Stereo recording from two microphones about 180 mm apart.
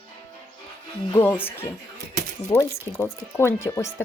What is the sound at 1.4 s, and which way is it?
Speech, 10° left (ahead or behind).